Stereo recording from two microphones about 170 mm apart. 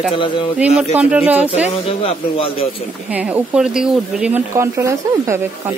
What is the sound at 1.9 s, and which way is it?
Speech, 35° left (ahead or behind).